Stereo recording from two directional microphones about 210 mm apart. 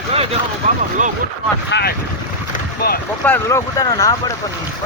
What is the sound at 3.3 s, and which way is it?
Speech, 15° left (ahead or behind).